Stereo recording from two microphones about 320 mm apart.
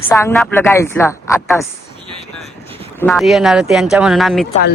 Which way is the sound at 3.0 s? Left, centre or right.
Centre.